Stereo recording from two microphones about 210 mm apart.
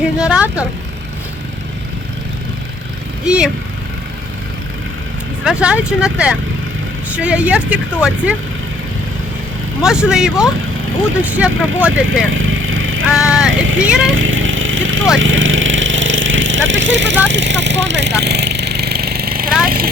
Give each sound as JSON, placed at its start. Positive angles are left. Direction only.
{"t": 0.0, "sound": "vehicle", "side_deg": -5}
{"t": 3.2, "sound": "speech", "side_deg": -5}
{"t": 5.5, "sound": "speech", "side_deg": -5}
{"t": 9.8, "sound": "speech", "side_deg": -5}
{"t": 12.3, "sound": "vehicle", "side_deg": -70}
{"t": 13.1, "sound": "speech", "side_deg": -5}
{"t": 13.5, "sound": "vehicle", "side_deg": -70}
{"t": 14.1, "sound": "a sound", "side_deg": -65}
{"t": 15.2, "sound": "vehicle", "side_deg": -65}